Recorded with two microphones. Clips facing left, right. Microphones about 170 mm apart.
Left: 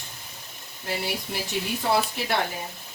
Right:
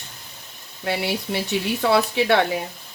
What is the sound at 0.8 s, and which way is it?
Speech, 75° right (ahead or behind).